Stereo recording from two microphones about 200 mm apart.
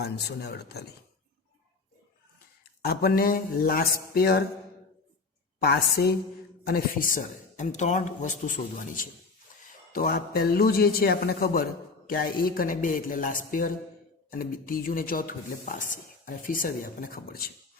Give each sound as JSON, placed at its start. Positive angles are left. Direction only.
{"t": 0.0, "sound": "speech", "side_deg": 55}
{"t": 2.8, "sound": "a man's voice", "side_deg": 50}
{"t": 5.5, "sound": "a man's voice", "side_deg": 55}